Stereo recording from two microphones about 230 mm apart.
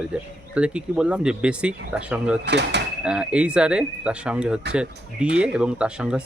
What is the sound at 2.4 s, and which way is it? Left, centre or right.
Speech, right.